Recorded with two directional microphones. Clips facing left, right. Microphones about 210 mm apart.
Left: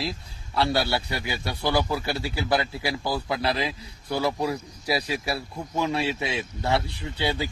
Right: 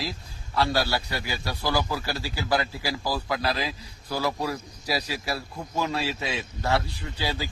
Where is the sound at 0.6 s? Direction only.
25° left (ahead or behind).